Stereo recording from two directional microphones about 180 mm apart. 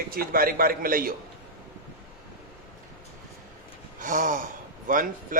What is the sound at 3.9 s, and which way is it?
Gasp, 45° right (ahead or behind).